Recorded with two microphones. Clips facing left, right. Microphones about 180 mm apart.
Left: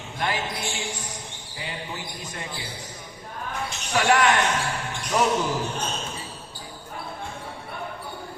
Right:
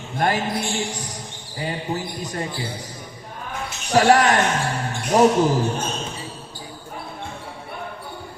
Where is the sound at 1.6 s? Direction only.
40° right (ahead or behind).